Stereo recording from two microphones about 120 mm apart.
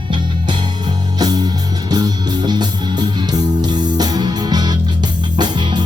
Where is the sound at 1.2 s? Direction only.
35° right (ahead or behind).